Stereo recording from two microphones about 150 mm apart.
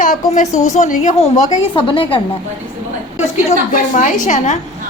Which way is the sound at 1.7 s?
35° left (ahead or behind).